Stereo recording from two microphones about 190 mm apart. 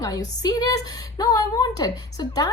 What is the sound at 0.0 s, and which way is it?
A woman's voice, 20° left (ahead or behind).